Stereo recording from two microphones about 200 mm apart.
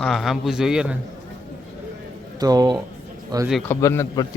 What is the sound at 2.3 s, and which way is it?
Speech, 20° right (ahead or behind).